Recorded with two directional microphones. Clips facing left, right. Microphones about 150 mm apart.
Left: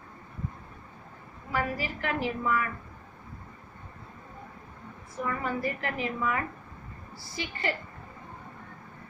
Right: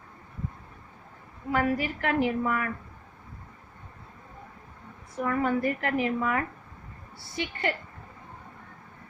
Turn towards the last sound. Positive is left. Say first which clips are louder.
# right 2 dB
turn(degrees=-65)  # may be behind; listen again after turning